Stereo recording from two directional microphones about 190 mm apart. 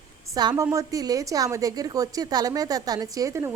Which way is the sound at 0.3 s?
20° right (ahead or behind).